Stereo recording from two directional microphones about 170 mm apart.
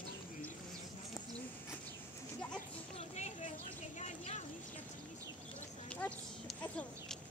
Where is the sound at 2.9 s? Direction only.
40° left (ahead or behind).